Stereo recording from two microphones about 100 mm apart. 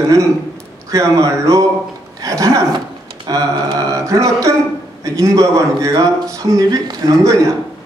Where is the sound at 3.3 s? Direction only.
35° right (ahead or behind).